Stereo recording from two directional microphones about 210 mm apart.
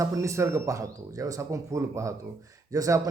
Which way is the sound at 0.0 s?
15° right (ahead or behind).